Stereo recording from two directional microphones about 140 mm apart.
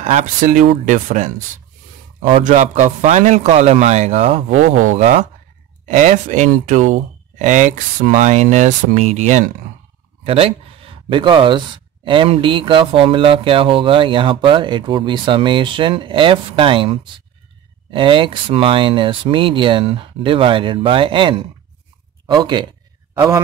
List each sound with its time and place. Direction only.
0.0 s speech: 60° right (ahead or behind); by 4.6 s 45° right (ahead or behind)
4.8 s speech: 55° right (ahead or behind)
10.2 s speech: 40° right (ahead or behind)